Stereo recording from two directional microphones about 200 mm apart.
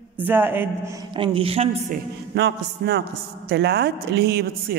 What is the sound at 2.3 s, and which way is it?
A man's voice, 55° right (ahead or behind).